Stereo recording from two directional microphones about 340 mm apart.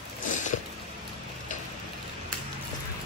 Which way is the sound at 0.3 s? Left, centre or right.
Left.